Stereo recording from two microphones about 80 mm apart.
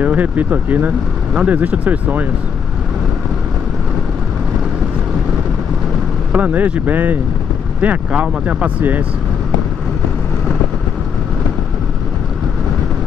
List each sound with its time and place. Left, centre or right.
0.0 s speech: right
6.3 s speech: right